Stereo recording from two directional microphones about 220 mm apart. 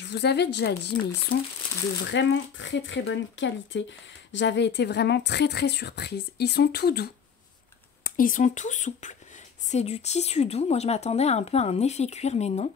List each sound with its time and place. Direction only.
0.1 s a woman's voice: 50° left (ahead or behind)
2.0 s a woman's voice: 55° left (ahead or behind); by 12.7 s 30° left (ahead or behind)